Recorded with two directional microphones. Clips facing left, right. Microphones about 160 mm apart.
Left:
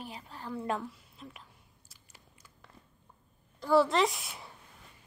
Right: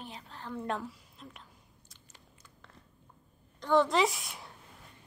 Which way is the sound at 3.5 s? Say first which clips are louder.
Left 1 dB; 5° left (ahead or behind).